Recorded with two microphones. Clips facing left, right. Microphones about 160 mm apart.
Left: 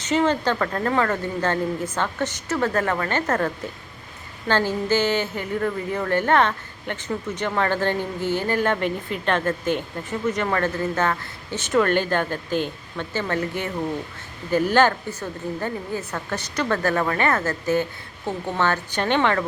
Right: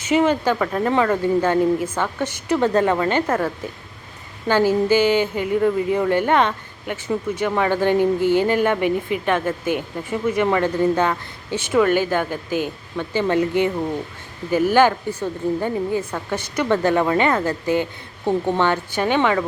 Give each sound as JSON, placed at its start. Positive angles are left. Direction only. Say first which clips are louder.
{"t": 0.0, "sound": "a woman's voice", "louder": "right 3 dB", "side_deg": -10}